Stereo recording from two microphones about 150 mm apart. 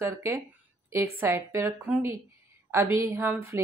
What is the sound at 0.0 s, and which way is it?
A woman's voice, 20° right (ahead or behind).